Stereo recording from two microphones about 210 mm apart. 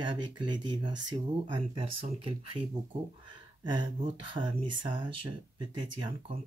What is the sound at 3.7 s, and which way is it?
Speech, 20° right (ahead or behind).